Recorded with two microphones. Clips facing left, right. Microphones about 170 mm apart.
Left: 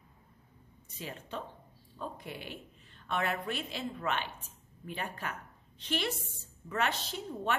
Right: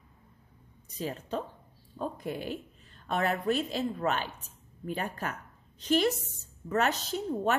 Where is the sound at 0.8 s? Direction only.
40° right (ahead or behind).